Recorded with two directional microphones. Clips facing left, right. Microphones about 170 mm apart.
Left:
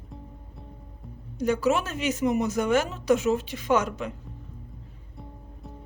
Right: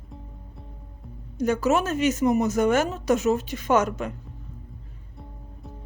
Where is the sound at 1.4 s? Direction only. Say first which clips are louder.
Right 2 dB; 45° right (ahead or behind).